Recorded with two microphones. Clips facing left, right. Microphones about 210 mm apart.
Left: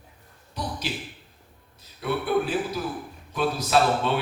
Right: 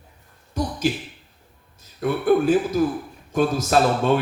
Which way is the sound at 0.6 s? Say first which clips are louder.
Right 7 dB; 45° right (ahead or behind).